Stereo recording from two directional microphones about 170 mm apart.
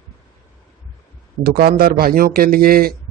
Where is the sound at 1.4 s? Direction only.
60° right (ahead or behind).